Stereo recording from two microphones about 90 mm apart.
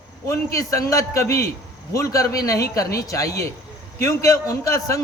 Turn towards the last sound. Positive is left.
turn(degrees=35)  # may be behind; listen again after turning